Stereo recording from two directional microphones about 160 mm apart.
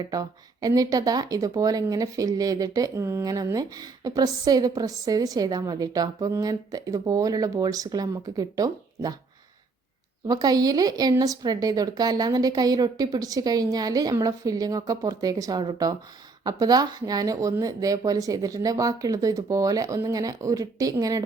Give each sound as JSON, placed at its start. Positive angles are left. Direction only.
{"t": 0.0, "sound": "speech", "side_deg": -25}
{"t": 10.2, "sound": "speech", "side_deg": -25}